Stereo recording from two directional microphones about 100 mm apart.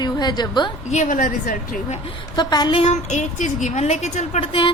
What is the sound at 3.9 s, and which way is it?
Speech, 75° left (ahead or behind).